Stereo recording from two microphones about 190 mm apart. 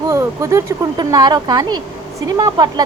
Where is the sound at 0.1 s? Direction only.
15° right (ahead or behind).